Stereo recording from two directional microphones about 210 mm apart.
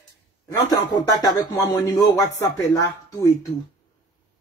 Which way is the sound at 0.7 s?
15° left (ahead or behind).